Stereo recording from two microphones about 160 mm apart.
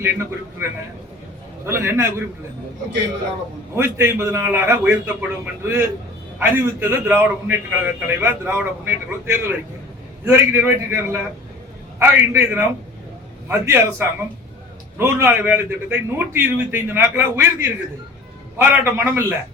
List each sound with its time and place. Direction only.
0.0 s a man's voice: 15° right (ahead or behind)
3.8 s a man's voice: 15° right (ahead or behind)